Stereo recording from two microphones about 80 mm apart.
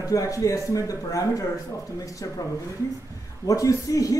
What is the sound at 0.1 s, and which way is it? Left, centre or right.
Speech, left.